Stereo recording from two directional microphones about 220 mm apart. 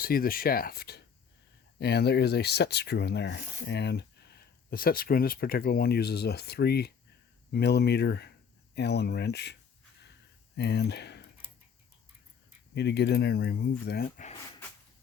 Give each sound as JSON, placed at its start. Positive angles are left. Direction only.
{"t": 0.0, "sound": "speech", "side_deg": 40}
{"t": 10.6, "sound": "speech", "side_deg": 50}
{"t": 12.7, "sound": "speech", "side_deg": 50}